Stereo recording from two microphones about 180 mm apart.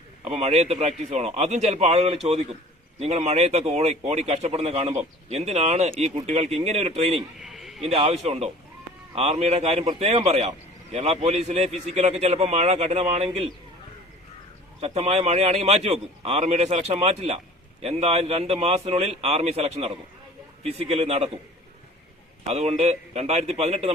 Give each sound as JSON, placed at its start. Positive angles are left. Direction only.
{"t": 0.3, "sound": "a man's voice", "side_deg": -35}
{"t": 7.4, "sound": "a sound", "side_deg": 0}
{"t": 7.8, "sound": "a man's voice", "side_deg": -35}
{"t": 14.8, "sound": "a man's voice", "side_deg": -35}
{"t": 22.4, "sound": "a man's voice", "side_deg": -35}